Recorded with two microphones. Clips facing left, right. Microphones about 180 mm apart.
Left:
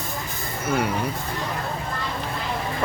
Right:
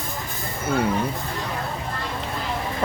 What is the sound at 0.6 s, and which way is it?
Speech, 30° right (ahead or behind).